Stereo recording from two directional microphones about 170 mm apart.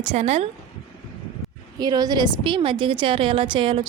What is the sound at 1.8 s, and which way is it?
A woman's voice, 25° right (ahead or behind).